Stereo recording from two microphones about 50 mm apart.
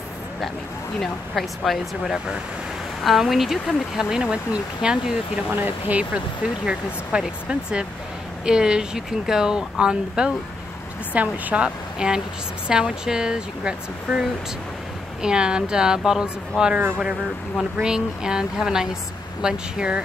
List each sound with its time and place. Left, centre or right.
1.3 s speech: centre
3.0 s speech: centre
5.6 s speech: right
11.1 s speech: right
12.0 s speech: centre